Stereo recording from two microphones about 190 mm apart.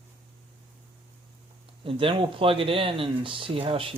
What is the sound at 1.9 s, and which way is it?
Speech, 25° right (ahead or behind).